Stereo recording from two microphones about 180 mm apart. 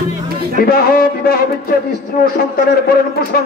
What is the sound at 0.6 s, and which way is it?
A man's voice, 55° left (ahead or behind).